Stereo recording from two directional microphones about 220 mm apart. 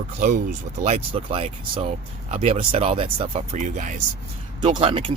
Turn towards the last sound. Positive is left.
turn(degrees=-25)  # may be behind; listen again after turning